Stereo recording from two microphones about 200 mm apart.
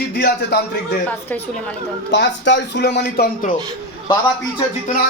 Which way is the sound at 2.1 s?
60° left (ahead or behind).